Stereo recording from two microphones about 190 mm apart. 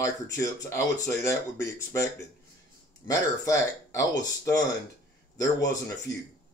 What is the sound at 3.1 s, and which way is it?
Speech, 15° left (ahead or behind).